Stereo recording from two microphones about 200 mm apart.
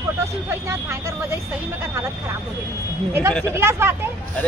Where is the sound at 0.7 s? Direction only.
15° right (ahead or behind).